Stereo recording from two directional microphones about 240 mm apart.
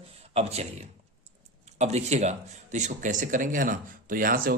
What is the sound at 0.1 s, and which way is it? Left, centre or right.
A man's voice, right.